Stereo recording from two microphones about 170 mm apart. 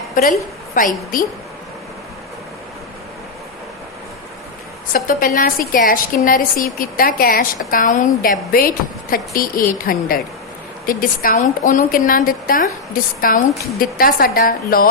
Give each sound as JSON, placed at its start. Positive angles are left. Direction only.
{"t": 0.2, "sound": "a woman's voice", "side_deg": 50}
{"t": 4.9, "sound": "a woman's voice", "side_deg": 55}